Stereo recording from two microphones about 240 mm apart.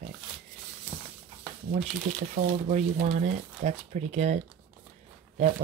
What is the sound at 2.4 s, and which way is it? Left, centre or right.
Speech, right.